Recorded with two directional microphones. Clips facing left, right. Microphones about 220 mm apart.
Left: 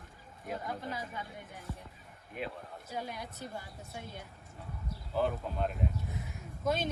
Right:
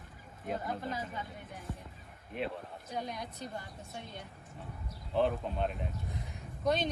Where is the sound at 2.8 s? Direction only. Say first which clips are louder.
Right 1 dB; 5° left (ahead or behind).